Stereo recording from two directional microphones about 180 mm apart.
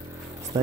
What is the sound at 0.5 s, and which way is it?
Speech, 20° right (ahead or behind).